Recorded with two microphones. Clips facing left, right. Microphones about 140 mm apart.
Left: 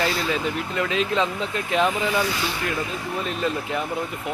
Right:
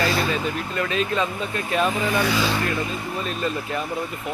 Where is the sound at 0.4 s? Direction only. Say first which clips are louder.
Even; 15° left (ahead or behind).